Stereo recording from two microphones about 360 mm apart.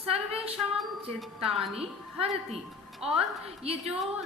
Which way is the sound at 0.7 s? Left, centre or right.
Centre.